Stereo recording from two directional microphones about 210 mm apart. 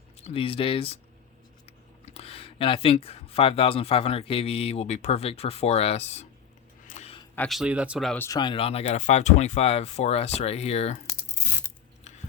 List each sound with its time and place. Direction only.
0.2 s speech: 25° left (ahead or behind)
2.1 s speech: 25° left (ahead or behind)
6.8 s a sound: 30° left (ahead or behind)
7.3 s speech: centre (ahead or behind)
8.3 s speech: 20° left (ahead or behind)